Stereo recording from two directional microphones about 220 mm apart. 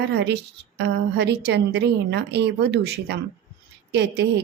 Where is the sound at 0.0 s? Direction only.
50° right (ahead or behind).